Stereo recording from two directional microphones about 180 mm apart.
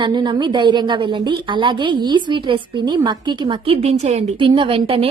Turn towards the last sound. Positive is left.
turn(degrees=-30)  # may be behind; listen again after turning